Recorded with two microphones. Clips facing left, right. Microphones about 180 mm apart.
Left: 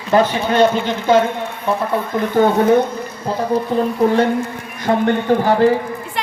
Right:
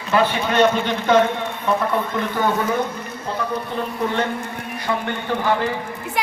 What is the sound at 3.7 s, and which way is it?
Speech, 40° left (ahead or behind).